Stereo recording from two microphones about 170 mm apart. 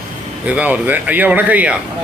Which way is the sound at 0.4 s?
10° right (ahead or behind).